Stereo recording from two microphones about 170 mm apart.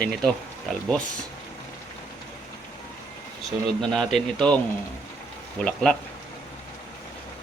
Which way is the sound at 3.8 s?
Centre (ahead or behind).